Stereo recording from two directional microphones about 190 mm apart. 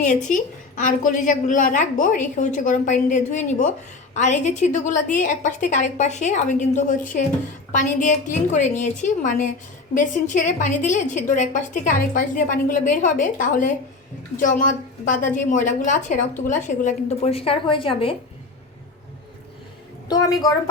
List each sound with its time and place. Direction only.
0.8 s a woman's voice: 45° left (ahead or behind)
20.1 s a woman's voice: 20° left (ahead or behind)